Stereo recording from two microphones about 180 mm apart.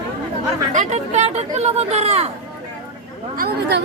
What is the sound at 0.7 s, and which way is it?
Speech, 40° right (ahead or behind).